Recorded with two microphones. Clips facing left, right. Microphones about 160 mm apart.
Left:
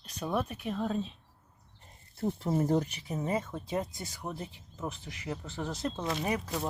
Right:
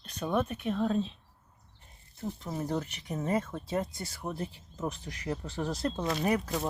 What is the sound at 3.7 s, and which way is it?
Speech, 20° left (ahead or behind).